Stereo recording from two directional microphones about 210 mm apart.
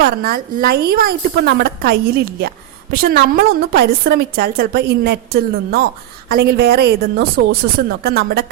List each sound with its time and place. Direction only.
0.0 s a woman's voice: 45° right (ahead or behind)